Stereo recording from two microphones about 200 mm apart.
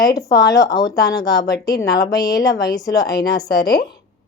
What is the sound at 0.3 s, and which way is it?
A woman's voice, 15° left (ahead or behind).